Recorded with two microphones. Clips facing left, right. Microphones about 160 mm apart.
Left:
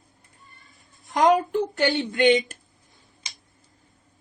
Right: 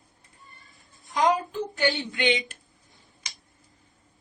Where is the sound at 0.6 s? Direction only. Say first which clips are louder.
Left 1 dB; centre (ahead or behind).